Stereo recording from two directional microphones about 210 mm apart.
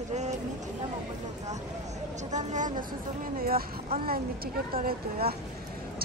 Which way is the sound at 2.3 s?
35° right (ahead or behind).